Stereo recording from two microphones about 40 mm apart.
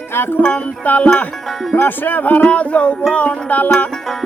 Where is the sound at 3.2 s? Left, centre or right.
Left.